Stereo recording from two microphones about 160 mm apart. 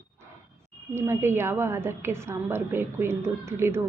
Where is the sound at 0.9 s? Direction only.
15° right (ahead or behind).